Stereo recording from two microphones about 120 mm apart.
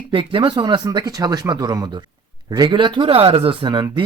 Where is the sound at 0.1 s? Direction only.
45° right (ahead or behind).